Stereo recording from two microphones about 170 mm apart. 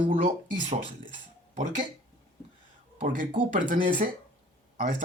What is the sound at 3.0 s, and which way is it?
Speech, 50° right (ahead or behind).